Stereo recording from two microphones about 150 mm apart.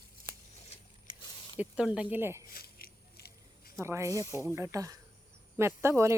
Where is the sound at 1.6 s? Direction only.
10° right (ahead or behind).